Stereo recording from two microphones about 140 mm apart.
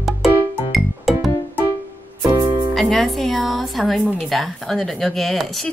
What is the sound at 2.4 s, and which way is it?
Music, 30° right (ahead or behind).